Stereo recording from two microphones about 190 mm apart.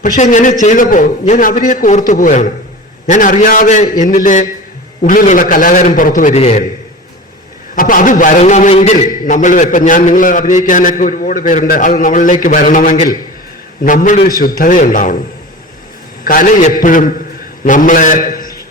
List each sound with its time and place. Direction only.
0.0 s a man's voice: 40° left (ahead or behind)
7.8 s a man's voice: 45° left (ahead or behind)
16.2 s a man's voice: 45° left (ahead or behind)